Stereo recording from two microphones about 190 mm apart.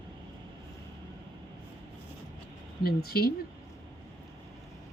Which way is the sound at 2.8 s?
55° left (ahead or behind).